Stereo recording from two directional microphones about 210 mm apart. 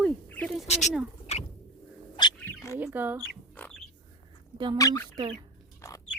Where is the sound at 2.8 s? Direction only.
10° right (ahead or behind).